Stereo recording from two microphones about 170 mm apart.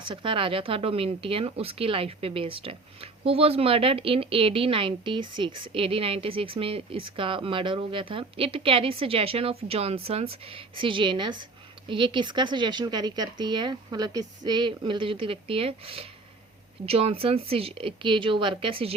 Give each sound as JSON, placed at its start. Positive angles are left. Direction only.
{"t": 0.0, "sound": "speech", "side_deg": -30}